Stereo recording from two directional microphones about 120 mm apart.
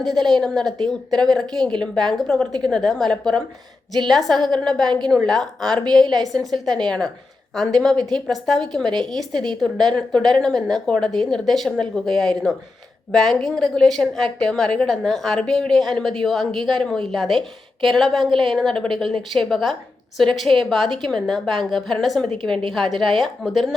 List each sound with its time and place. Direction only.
0.0 s a woman's voice: centre (ahead or behind)
5.8 s a woman's voice: 35° right (ahead or behind)
6.3 s a woman's voice: centre (ahead or behind)
22.3 s a woman's voice: 45° right (ahead or behind)
22.7 s a woman's voice: centre (ahead or behind)